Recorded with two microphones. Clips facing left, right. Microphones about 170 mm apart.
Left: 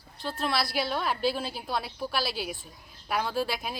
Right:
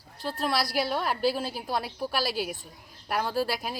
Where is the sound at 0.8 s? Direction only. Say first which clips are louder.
Right 2 dB; 10° right (ahead or behind).